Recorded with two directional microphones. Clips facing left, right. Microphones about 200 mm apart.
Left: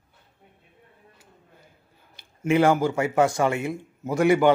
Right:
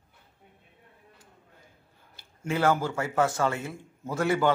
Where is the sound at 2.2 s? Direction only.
20° left (ahead or behind).